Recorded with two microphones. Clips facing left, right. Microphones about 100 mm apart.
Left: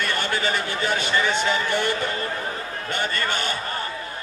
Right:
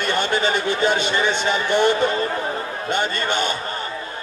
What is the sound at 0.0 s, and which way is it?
Speech, 20° right (ahead or behind).